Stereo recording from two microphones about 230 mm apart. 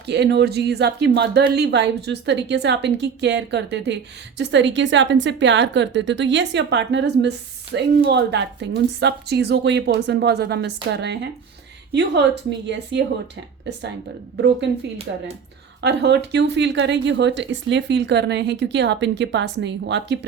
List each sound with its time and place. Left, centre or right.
0.1 s speech: right
12.5 s speech: right
15.1 s speech: right